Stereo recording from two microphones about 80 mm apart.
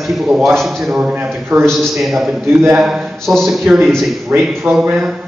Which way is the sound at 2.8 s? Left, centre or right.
Centre.